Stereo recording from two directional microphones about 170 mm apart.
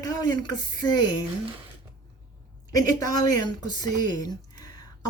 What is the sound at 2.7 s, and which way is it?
Speech, 20° left (ahead or behind).